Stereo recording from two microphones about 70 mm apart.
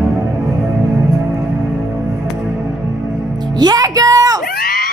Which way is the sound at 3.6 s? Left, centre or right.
Right.